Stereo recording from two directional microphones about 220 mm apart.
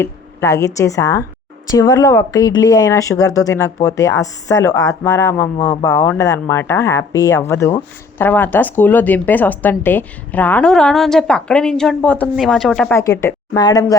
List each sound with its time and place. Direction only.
0.0 s speech: 15° left (ahead or behind)
13.0 s speech: 15° left (ahead or behind)